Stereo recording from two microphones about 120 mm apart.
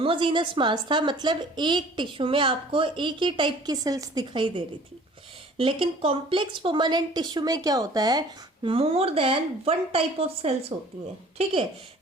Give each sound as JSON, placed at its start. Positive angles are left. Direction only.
{"t": 0.0, "sound": "a woman's voice", "side_deg": -45}
{"t": 3.8, "sound": "a woman's voice", "side_deg": -30}
{"t": 8.6, "sound": "a woman's voice", "side_deg": -50}